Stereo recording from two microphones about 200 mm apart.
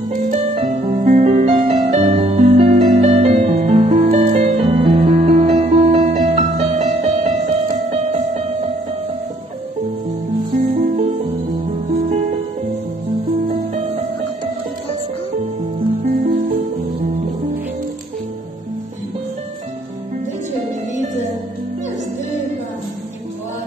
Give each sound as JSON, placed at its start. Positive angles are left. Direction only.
{"t": 0.1, "sound": "music", "side_deg": -35}
{"t": 10.5, "sound": "music", "side_deg": -35}